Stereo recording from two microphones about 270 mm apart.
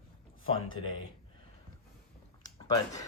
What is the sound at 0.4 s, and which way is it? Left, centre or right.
Speech, centre.